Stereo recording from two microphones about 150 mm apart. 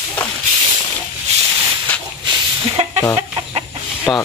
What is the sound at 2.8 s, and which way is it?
Chicken, 40° right (ahead or behind).